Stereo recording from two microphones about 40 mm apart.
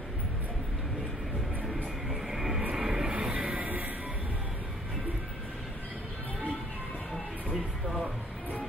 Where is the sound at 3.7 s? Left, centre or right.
Right.